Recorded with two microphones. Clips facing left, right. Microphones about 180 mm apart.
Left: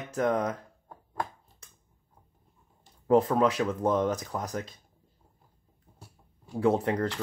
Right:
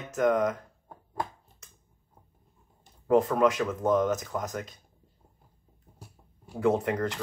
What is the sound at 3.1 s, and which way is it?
Speech, 35° left (ahead or behind).